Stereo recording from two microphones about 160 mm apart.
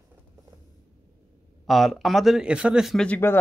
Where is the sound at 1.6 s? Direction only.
Centre (ahead or behind).